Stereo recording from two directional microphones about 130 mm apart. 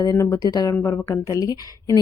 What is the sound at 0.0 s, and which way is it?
A woman's voice, 25° left (ahead or behind).